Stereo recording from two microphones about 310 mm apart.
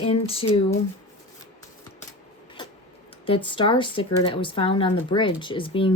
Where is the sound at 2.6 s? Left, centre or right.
Centre.